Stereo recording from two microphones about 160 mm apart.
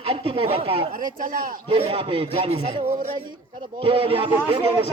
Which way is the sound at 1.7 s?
35° right (ahead or behind).